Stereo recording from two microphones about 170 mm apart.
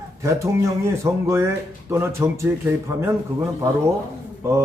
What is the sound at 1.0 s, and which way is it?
A man's voice, 15° right (ahead or behind).